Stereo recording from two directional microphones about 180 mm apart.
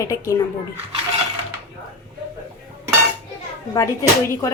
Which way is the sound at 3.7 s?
15° left (ahead or behind).